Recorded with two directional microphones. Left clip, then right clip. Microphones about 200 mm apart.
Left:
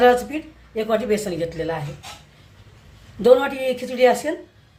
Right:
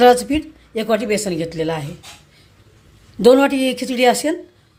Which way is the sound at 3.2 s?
45° right (ahead or behind).